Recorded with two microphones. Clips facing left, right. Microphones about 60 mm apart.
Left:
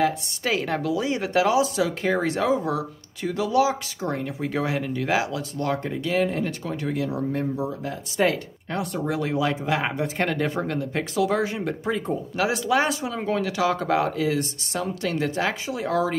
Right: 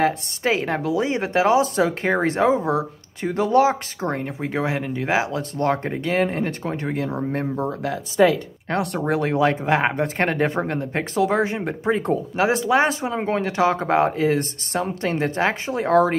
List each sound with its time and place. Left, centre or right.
0.0 s a woman's voice: right
4.4 s speech: right
8.6 s speech: right
9.0 s speech: right